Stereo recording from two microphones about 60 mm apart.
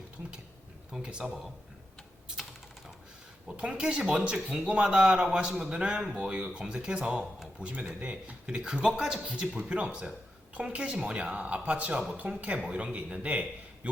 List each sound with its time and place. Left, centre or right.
1.0 s a man's voice: centre
3.6 s a man's voice: centre
7.6 s a woman's voice: right